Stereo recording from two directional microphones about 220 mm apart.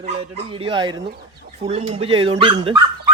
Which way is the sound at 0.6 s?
20° right (ahead or behind).